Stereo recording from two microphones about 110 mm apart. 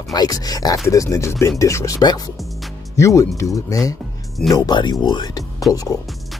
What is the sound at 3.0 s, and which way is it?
Speech, 30° left (ahead or behind).